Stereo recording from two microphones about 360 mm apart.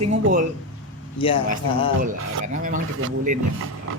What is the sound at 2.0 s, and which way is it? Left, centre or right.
Speech, right.